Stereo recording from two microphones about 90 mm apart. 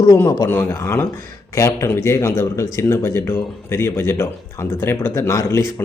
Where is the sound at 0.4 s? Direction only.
25° left (ahead or behind).